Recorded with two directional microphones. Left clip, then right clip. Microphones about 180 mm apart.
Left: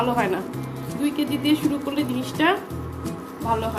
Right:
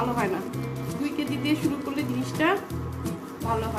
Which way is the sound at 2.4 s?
45° left (ahead or behind).